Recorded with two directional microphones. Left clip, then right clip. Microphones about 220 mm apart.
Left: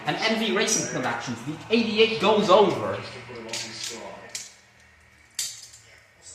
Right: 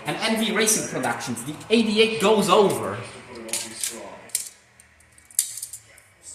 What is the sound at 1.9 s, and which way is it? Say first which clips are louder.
Speech: even; 35° right (ahead or behind).